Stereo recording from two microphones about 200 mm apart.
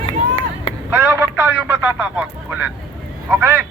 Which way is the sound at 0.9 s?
10° right (ahead or behind).